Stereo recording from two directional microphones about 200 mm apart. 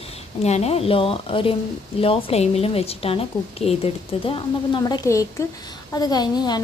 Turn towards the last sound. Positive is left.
turn(degrees=20)  # may be behind; listen again after turning